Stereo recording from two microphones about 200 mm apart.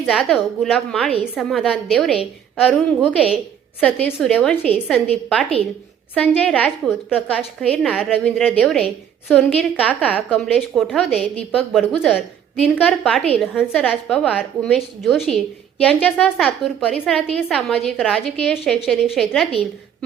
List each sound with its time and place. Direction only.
0.0 s a woman's voice: centre (ahead or behind)